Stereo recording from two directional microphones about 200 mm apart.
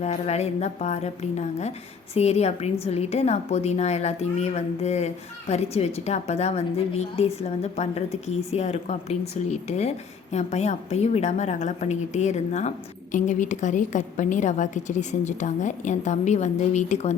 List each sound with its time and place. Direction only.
0.0 s a woman's voice: 35° left (ahead or behind)